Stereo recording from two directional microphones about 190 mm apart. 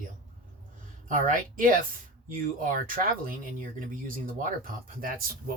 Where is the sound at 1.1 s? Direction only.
45° right (ahead or behind).